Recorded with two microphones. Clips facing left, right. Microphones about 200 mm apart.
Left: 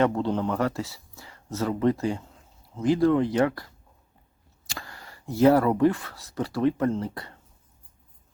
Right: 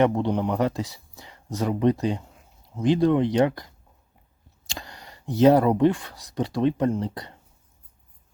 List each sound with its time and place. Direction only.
0.0 s speech: 15° right (ahead or behind)
4.7 s speech: 20° right (ahead or behind)